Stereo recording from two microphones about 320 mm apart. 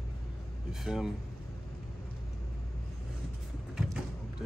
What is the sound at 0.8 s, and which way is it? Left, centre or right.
Speech, centre.